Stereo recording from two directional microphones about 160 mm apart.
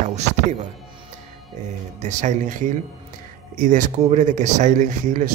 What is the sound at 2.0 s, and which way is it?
Speech, 50° right (ahead or behind).